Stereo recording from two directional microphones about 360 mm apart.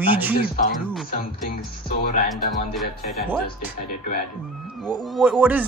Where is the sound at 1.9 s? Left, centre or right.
Left.